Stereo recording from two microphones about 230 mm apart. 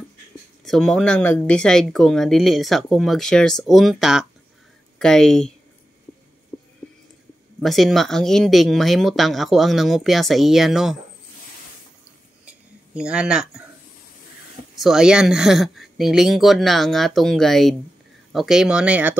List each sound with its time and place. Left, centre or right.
0.7 s speech: centre
7.6 s speech: centre
12.4 s a sound: centre
14.8 s speech: centre